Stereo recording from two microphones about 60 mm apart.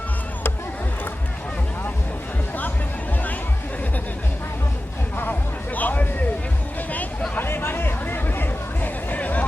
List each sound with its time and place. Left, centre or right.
5.1 s music: left
7.3 s chatter: left